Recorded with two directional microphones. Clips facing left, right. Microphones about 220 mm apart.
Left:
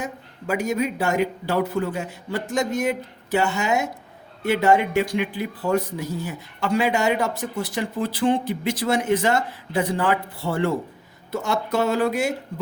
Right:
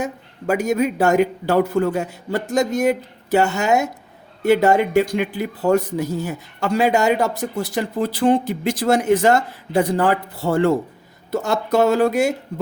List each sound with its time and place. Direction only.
0.0 s speech: 45° right (ahead or behind)